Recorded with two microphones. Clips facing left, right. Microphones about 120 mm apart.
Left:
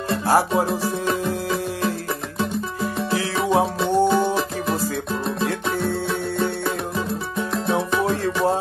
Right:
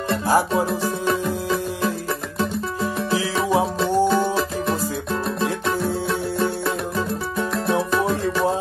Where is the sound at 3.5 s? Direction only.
15° left (ahead or behind).